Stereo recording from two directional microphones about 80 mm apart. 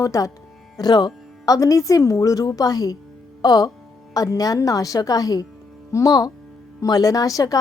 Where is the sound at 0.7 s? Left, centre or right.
Left.